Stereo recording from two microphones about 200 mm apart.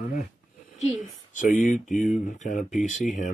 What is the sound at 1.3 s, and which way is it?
Speech, 40° left (ahead or behind).